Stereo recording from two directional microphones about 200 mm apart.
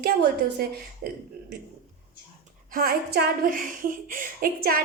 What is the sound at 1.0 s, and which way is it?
Speech, 50° right (ahead or behind).